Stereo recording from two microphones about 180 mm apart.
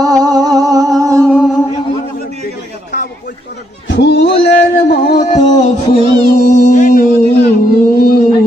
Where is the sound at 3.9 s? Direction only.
75° left (ahead or behind).